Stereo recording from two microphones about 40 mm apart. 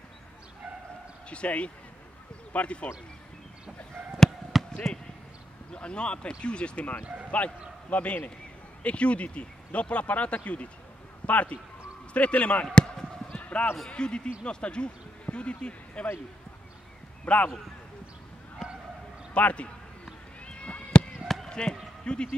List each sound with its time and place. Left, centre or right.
1.3 s speech: left
4.2 s basketball bounce: centre
4.9 s speech: centre
5.7 s a man's voice: left
12.7 s basketball bounce: left
13.4 s clip-clop: left
13.8 s speech: left
17.2 s speech: left
19.3 s speech: left
20.4 s cat: left
21.5 s basketball bounce: centre
22.0 s speech: left